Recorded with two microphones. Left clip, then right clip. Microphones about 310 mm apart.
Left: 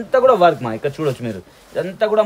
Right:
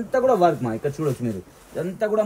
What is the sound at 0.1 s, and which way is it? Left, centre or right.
Speech, left.